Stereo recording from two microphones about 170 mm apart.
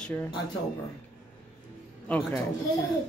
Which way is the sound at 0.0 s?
10° left (ahead or behind).